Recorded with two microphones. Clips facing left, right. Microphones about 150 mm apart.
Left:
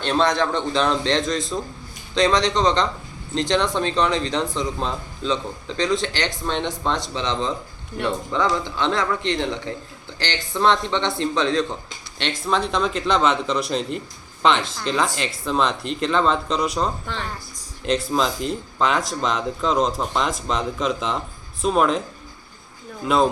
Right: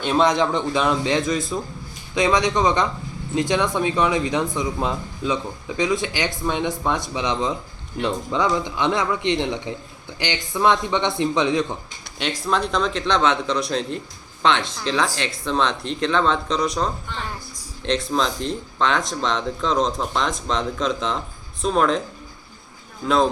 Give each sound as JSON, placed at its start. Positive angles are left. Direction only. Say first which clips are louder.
{"t": 0.0, "sound": "speech", "louder": "right 2 dB", "side_deg": -10}
{"t": 12.5, "sound": "speech", "louder": "even", "side_deg": 0}
{"t": 23.0, "sound": "speech", "louder": "even", "side_deg": 5}